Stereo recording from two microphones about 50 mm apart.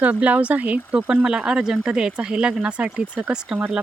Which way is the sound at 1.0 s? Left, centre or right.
Centre.